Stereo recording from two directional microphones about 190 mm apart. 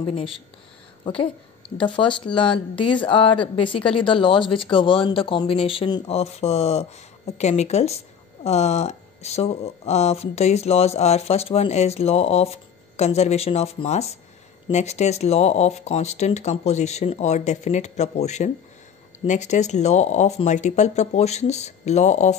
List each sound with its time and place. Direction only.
0.1 s a woman's voice: 30° left (ahead or behind)